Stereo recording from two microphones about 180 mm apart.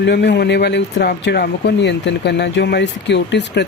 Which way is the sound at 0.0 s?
70° left (ahead or behind).